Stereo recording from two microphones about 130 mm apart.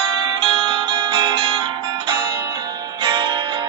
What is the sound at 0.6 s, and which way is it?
Music, 35° right (ahead or behind).